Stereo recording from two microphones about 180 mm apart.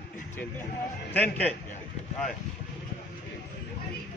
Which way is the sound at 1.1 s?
10° left (ahead or behind).